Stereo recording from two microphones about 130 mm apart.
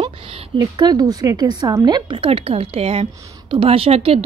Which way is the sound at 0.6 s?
30° right (ahead or behind).